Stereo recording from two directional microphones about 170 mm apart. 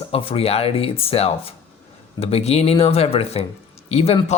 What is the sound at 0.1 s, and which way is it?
Speech, 35° left (ahead or behind).